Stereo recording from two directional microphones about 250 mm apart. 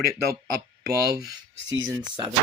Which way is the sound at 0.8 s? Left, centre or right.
Right.